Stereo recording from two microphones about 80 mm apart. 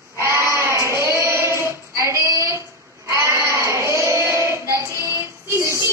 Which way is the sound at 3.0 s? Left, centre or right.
Right.